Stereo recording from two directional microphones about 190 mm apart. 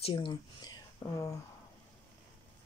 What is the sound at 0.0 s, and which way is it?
Speech, 25° left (ahead or behind).